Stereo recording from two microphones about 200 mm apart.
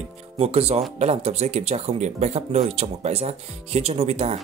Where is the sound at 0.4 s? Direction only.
30° right (ahead or behind).